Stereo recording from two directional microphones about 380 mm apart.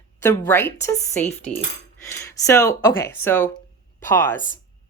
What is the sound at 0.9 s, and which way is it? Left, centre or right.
Speech, centre.